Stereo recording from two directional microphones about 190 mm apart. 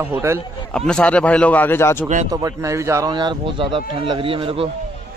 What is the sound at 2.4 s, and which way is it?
A man's voice, 15° right (ahead or behind).